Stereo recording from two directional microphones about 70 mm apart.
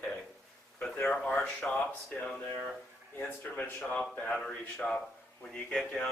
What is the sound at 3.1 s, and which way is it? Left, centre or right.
A man's voice, left.